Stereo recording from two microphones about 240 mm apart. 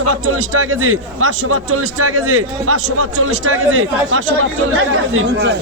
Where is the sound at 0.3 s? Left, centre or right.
Right.